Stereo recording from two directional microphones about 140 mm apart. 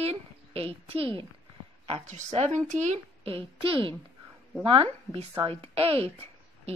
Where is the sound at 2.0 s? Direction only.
55° right (ahead or behind).